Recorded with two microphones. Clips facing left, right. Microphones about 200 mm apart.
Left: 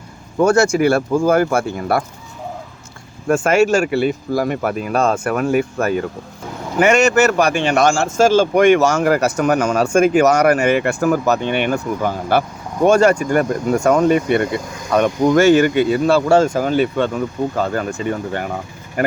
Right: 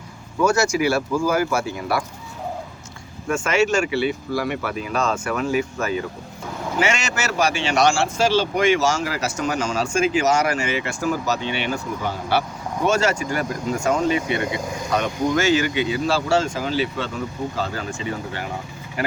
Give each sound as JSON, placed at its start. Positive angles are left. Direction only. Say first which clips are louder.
{"t": 0.3, "sound": "speech", "louder": "left 6 dB", "side_deg": 55}
{"t": 3.2, "sound": "speech", "louder": "left 6 dB", "side_deg": 55}